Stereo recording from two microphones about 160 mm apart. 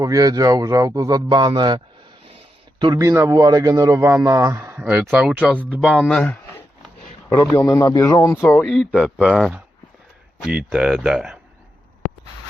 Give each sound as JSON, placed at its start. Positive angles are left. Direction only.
{"t": 0.0, "sound": "a man's voice", "side_deg": -20}
{"t": 7.5, "sound": "speech", "side_deg": 15}